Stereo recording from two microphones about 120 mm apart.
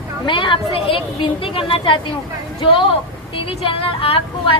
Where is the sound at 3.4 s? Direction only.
45° left (ahead or behind).